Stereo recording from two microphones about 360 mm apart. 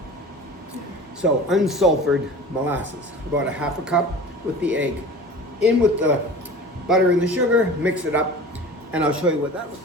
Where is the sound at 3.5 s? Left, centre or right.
Centre.